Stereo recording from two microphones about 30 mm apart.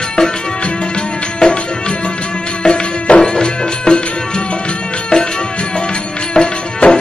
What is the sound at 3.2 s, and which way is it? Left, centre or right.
Music, left.